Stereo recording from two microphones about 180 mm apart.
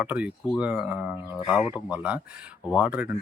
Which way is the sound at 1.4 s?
20° left (ahead or behind).